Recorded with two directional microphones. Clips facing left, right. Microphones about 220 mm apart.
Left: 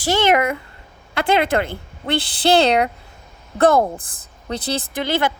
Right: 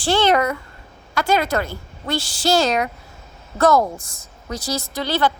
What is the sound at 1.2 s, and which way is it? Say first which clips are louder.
A woman's voice: left 2 dB; 30° left (ahead or behind).